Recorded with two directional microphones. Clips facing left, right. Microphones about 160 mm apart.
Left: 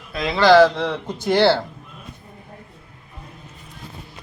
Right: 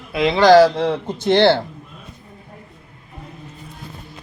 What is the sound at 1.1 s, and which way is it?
Speech, 20° right (ahead or behind).